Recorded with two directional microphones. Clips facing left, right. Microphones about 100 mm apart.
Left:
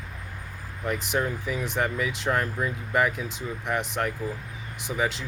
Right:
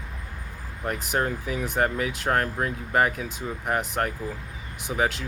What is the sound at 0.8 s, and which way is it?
Speech, 50° right (ahead or behind).